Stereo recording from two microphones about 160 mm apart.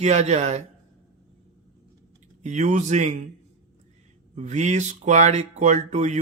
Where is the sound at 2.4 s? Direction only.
45° right (ahead or behind).